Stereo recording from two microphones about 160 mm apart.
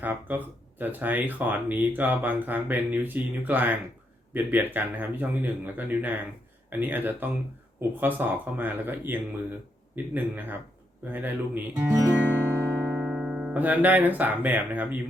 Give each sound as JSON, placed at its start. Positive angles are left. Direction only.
{"t": 0.0, "sound": "speech", "side_deg": -10}
{"t": 12.2, "sound": "music", "side_deg": -10}